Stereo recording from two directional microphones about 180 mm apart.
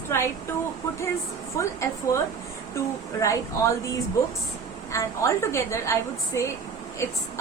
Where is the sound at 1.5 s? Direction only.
15° left (ahead or behind).